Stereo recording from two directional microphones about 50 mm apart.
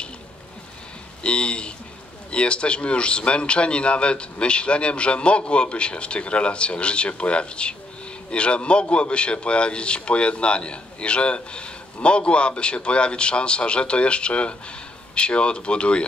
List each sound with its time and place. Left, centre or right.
1.2 s a man's voice: left